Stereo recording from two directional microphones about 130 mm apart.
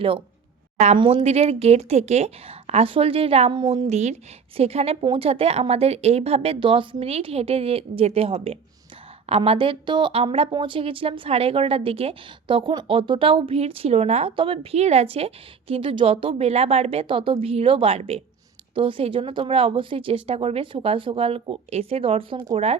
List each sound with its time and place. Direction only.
0.9 s a woman's voice: 45° right (ahead or behind)
3.5 s a woman's voice: 40° right (ahead or behind)
3.8 s a woman's voice: 60° right (ahead or behind)